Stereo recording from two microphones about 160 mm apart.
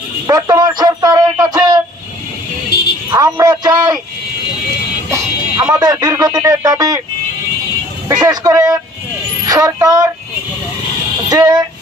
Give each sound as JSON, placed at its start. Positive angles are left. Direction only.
{"t": 0.3, "sound": "a sound", "side_deg": -25}
{"t": 2.7, "sound": "a sound", "side_deg": 80}
{"t": 3.1, "sound": "a man's voice", "side_deg": -20}
{"t": 5.1, "sound": "speech", "side_deg": -20}
{"t": 8.3, "sound": "a man's voice", "side_deg": -20}
{"t": 11.2, "sound": "speech", "side_deg": -25}